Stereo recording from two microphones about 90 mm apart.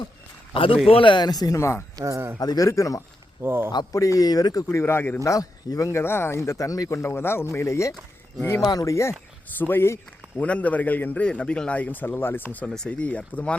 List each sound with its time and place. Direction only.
0.5 s speech: 80° left; by 1.5 s 45° left (ahead or behind)
1.5 s speech: 30° left (ahead or behind)
2.0 s speech: 35° right (ahead or behind)
2.4 s speech: 45° left (ahead or behind)
3.4 s speech: 25° right (ahead or behind)
3.9 s speech: 40° left (ahead or behind)
4.8 s a man's voice: 25° left (ahead or behind)
5.2 s speech: 40° left (ahead or behind)
8.4 s a man's voice: 25° left (ahead or behind)
8.6 s speech: 40° left (ahead or behind)
9.6 s a man's voice: 25° left (ahead or behind)
10.4 s a man's voice: 15° left (ahead or behind)